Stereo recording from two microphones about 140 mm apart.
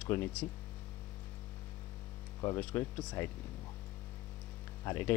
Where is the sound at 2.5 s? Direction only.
15° left (ahead or behind).